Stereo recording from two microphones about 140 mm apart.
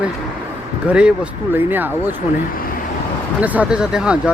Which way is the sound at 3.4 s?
10° right (ahead or behind).